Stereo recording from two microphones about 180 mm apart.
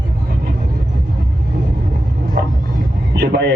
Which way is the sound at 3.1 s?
70° right (ahead or behind).